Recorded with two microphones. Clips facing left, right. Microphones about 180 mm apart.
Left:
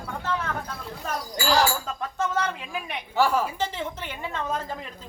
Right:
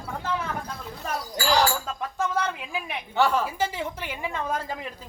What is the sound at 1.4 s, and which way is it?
A woman's voice, centre (ahead or behind).